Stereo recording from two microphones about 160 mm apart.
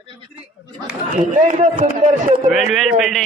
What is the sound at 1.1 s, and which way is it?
Speech, 50° right (ahead or behind).